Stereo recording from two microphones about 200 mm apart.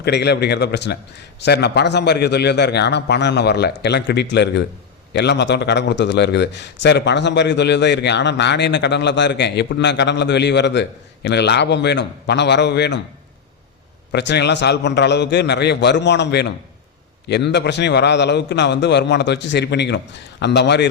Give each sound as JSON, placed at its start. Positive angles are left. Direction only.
{"t": 0.0, "sound": "a man's voice", "side_deg": 55}
{"t": 14.1, "sound": "a man's voice", "side_deg": 55}